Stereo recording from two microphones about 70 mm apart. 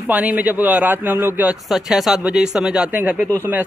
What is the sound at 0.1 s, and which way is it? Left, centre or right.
A man's voice, right.